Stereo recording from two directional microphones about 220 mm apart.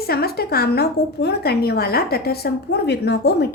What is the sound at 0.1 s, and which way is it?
A woman's voice, 45° left (ahead or behind).